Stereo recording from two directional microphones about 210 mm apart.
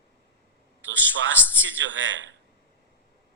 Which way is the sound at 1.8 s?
65° right (ahead or behind).